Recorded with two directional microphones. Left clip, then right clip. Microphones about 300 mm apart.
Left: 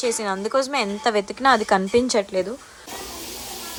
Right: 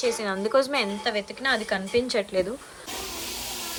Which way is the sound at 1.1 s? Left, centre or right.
Left.